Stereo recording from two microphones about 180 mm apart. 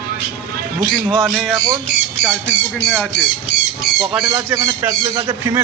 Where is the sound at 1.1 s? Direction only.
5° left (ahead or behind).